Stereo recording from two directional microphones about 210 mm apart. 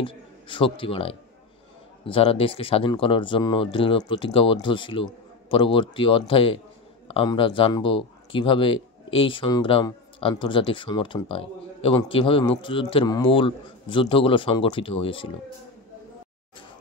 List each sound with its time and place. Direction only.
0.0 s a man's voice: 25° left (ahead or behind)